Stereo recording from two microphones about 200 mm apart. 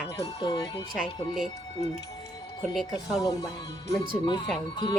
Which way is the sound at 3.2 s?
15° left (ahead or behind).